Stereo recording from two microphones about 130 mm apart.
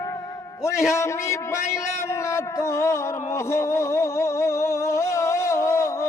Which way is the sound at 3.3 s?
20° left (ahead or behind).